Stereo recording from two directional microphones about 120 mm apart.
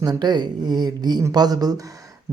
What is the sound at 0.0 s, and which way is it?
Speech, 35° right (ahead or behind).